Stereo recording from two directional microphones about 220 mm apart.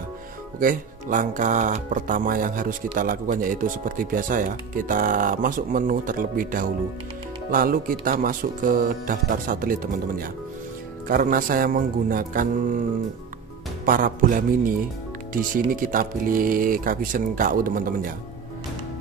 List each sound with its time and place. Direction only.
0.6 s speech: 40° right (ahead or behind)
13.8 s speech: 40° right (ahead or behind)